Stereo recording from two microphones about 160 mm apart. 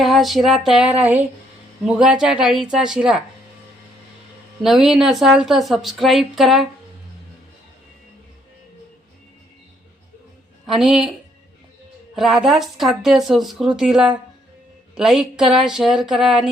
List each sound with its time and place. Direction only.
0.0 s a woman's voice: centre (ahead or behind)
4.6 s a woman's voice: centre (ahead or behind)
10.7 s a woman's voice: centre (ahead or behind)
12.1 s a woman's voice: centre (ahead or behind)